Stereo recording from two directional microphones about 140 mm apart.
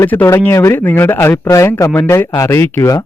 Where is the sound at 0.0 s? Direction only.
15° left (ahead or behind).